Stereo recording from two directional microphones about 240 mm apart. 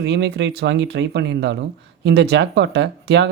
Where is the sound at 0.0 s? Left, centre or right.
Right.